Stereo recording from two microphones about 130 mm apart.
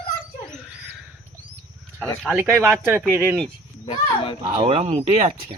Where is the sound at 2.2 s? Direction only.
10° right (ahead or behind).